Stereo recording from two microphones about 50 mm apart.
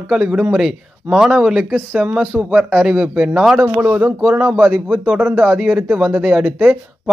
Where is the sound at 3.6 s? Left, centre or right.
Right.